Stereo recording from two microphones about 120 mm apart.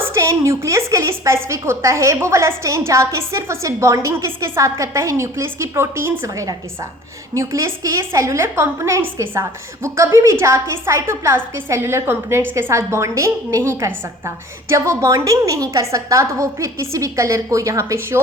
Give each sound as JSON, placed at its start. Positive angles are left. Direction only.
{"t": 0.0, "sound": "a woman's voice", "side_deg": -25}